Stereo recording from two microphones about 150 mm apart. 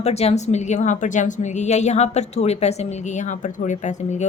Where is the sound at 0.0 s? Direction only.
45° left (ahead or behind).